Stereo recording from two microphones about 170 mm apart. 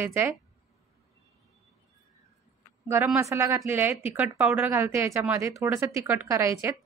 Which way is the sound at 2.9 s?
15° right (ahead or behind).